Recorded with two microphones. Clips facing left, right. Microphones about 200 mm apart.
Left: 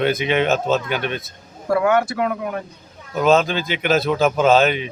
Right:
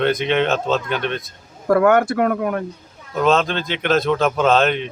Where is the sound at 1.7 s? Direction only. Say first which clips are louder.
Right 3 dB; 50° right (ahead or behind).